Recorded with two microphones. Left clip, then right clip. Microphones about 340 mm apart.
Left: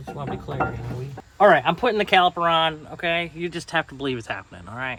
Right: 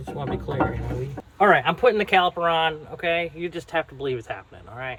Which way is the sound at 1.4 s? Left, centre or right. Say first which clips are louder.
Left 2 dB; left.